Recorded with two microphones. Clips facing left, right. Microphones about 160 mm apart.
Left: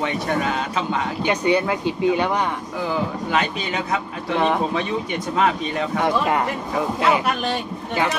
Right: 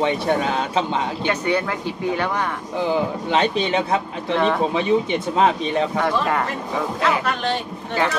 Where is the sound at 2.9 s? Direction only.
25° right (ahead or behind).